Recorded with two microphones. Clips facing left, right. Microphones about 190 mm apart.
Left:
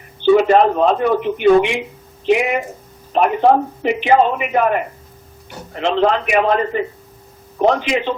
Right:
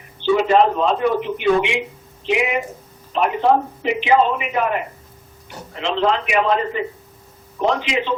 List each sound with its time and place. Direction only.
0.2 s a man's voice: 50° left (ahead or behind)